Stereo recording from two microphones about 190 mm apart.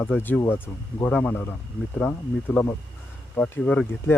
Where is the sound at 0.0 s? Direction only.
10° left (ahead or behind).